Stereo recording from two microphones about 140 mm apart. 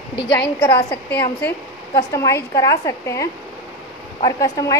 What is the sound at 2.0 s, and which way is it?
A woman's voice, 25° left (ahead or behind).